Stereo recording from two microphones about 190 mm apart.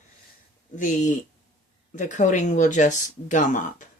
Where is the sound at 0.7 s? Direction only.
40° left (ahead or behind).